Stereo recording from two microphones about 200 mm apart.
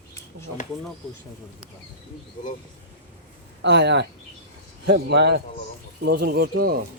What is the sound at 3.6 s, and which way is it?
A man's voice, 60° right (ahead or behind).